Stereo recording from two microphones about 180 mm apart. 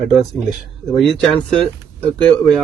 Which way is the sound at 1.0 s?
Centre (ahead or behind).